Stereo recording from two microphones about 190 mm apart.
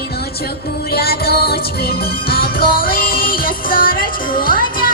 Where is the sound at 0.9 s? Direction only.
55° left (ahead or behind).